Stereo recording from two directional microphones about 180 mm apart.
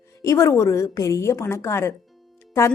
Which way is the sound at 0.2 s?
15° left (ahead or behind).